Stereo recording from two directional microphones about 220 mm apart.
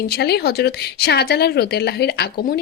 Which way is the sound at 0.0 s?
45° left (ahead or behind).